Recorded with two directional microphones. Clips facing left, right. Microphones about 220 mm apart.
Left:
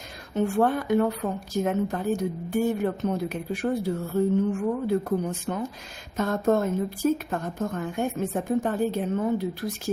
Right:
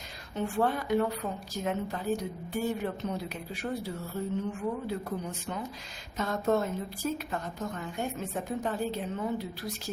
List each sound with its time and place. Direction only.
0.3 s a woman's voice: 50° left (ahead or behind)